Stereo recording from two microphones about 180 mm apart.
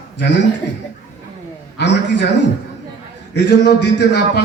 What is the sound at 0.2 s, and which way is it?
Speech, 75° left (ahead or behind).